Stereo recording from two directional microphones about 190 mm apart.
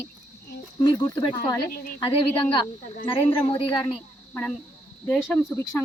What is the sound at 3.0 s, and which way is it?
Speech, 25° left (ahead or behind).